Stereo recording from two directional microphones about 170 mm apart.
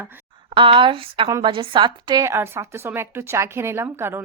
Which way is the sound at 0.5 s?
30° right (ahead or behind).